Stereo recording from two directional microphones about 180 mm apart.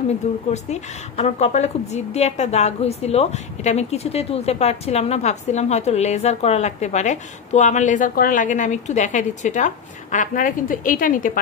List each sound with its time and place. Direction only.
0.5 s a woman's voice: 40° left (ahead or behind)